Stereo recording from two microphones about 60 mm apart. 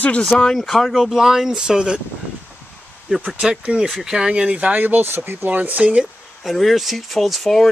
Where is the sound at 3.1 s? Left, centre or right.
Centre.